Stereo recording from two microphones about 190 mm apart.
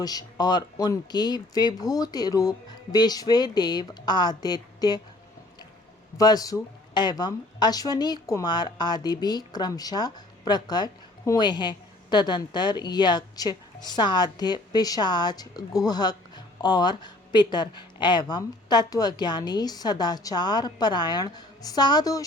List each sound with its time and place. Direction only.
0.0 s speech: 20° left (ahead or behind)
6.1 s speech: 20° left (ahead or behind)